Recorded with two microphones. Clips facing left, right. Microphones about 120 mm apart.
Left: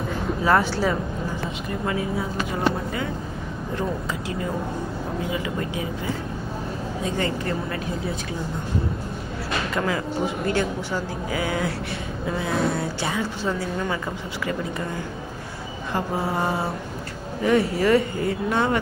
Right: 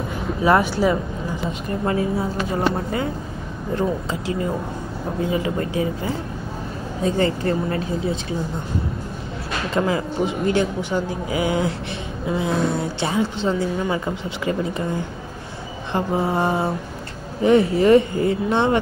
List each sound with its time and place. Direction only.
0.4 s speech: 15° right (ahead or behind)
5.3 s speech: 35° right (ahead or behind)
7.2 s speech: 35° right (ahead or behind)
9.8 s a woman's voice: 25° right (ahead or behind)
15.9 s a woman's voice: 25° right (ahead or behind)